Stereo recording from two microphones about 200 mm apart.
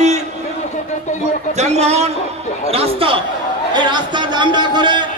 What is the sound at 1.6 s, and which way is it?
A man's voice, 35° right (ahead or behind).